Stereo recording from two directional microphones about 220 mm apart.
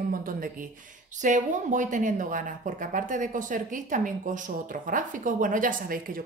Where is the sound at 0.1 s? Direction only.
40° right (ahead or behind).